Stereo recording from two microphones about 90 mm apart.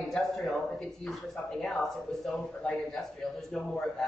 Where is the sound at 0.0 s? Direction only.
Centre (ahead or behind).